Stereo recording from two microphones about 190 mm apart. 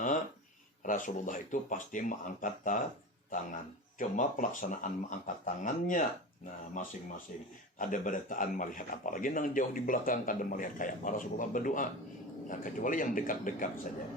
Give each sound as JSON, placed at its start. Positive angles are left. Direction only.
{"t": 0.9, "sound": "a man's voice", "side_deg": 45}